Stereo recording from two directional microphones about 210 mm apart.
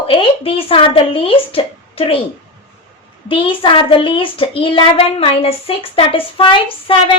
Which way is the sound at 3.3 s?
25° left (ahead or behind).